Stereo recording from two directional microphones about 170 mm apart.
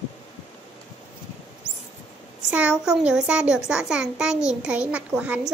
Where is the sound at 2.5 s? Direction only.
5° right (ahead or behind).